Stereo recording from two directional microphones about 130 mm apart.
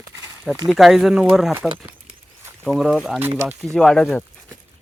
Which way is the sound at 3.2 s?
15° right (ahead or behind).